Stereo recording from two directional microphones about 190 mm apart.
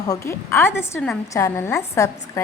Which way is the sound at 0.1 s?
15° left (ahead or behind).